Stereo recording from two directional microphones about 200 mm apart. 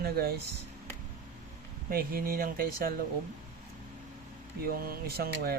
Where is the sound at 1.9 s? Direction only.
45° right (ahead or behind).